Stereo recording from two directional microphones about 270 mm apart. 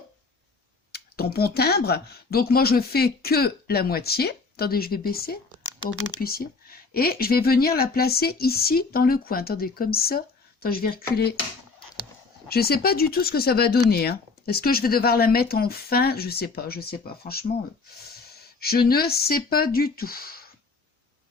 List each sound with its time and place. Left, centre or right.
0.9 s speech: left
12.5 s speech: left